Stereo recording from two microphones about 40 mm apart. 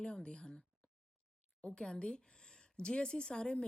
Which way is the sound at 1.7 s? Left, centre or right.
Left.